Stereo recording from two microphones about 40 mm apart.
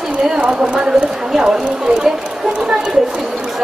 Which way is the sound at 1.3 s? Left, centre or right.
Centre.